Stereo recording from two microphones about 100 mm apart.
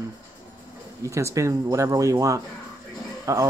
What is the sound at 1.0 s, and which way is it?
Speech, 30° right (ahead or behind).